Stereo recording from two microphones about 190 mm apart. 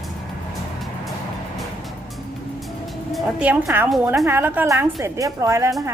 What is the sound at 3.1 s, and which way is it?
A woman's voice, centre (ahead or behind).